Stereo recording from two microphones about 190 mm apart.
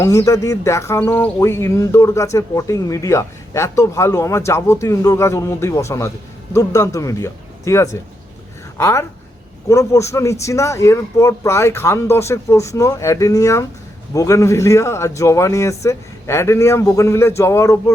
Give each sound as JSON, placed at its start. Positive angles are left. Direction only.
{"t": 0.0, "sound": "speech", "side_deg": 15}